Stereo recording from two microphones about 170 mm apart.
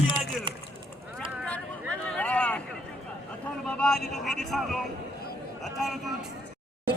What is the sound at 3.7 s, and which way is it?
Speech, 5° left (ahead or behind).